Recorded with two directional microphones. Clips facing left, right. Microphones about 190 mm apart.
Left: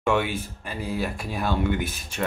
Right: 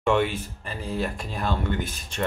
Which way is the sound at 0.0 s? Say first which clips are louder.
Right 1 dB; 5° left (ahead or behind).